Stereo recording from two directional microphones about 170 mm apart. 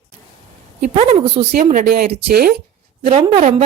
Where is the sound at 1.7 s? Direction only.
60° right (ahead or behind).